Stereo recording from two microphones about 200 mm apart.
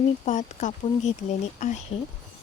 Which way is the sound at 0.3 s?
35° left (ahead or behind).